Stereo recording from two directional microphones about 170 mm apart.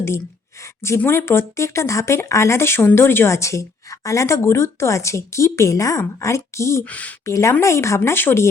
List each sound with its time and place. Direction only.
0.6 s speech: 15° left (ahead or behind)